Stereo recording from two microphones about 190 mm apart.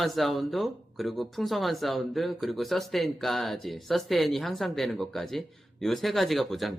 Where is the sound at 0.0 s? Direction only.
Centre (ahead or behind).